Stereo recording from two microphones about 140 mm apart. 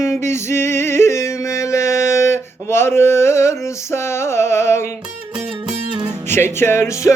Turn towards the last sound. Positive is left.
turn(degrees=20)  # may be behind; listen again after turning